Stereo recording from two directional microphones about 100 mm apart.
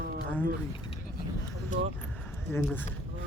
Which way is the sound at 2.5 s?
25° left (ahead or behind).